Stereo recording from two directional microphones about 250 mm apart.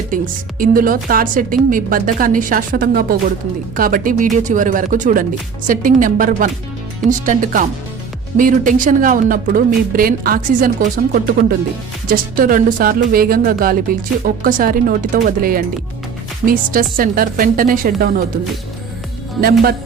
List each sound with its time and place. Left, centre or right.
0.6 s speech: right
19.4 s speech: right